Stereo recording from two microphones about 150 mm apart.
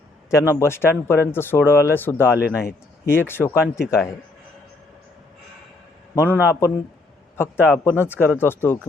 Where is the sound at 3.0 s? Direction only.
15° left (ahead or behind).